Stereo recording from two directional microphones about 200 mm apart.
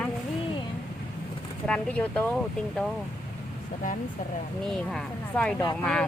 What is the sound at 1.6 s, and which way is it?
Speech, 5° left (ahead or behind).